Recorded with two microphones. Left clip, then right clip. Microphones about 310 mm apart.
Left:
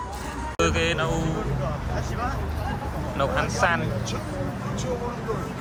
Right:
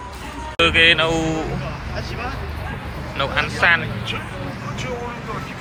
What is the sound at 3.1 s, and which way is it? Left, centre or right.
Speech, centre.